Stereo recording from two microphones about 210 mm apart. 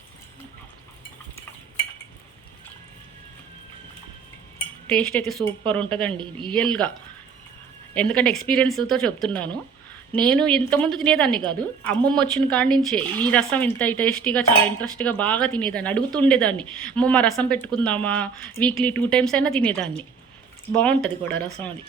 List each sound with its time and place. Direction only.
4.9 s speech: 5° left (ahead or behind)
6.1 s speech: 25° right (ahead or behind)
6.5 s speech: 5° left (ahead or behind)
7.9 s speech: 5° left (ahead or behind)
13.7 s cutlery: 5° left (ahead or behind)